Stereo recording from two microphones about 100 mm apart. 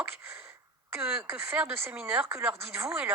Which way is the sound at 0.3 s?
25° right (ahead or behind).